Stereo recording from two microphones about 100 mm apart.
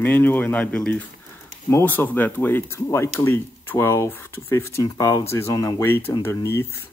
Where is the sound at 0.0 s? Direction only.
20° left (ahead or behind).